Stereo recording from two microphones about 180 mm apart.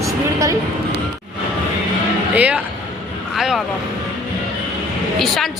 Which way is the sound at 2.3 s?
10° right (ahead or behind).